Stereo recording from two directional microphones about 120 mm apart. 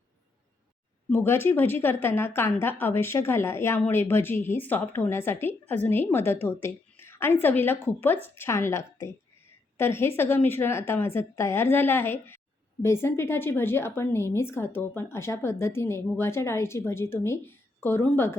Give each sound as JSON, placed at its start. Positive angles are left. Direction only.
{"t": 1.1, "sound": "a woman's voice", "side_deg": 20}